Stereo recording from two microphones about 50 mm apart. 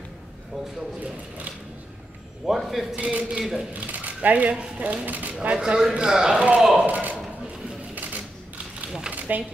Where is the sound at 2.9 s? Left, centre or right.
Right.